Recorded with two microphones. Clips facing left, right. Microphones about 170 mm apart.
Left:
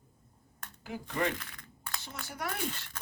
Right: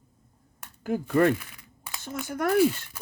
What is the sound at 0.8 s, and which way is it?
Speech, 50° right (ahead or behind).